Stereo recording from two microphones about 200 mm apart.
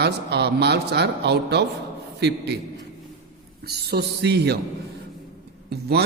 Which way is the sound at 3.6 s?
55° right (ahead or behind).